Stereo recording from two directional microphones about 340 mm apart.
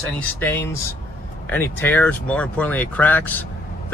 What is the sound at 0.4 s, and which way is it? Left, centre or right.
Speech, centre.